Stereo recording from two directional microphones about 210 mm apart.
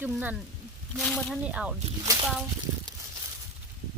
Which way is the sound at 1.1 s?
Centre (ahead or behind).